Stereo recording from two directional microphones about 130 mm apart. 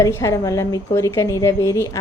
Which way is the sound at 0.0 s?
25° left (ahead or behind).